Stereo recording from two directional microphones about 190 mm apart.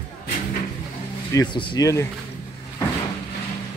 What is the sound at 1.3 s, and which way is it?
Speech, 20° left (ahead or behind).